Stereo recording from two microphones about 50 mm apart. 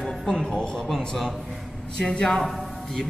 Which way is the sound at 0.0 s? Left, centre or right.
Centre.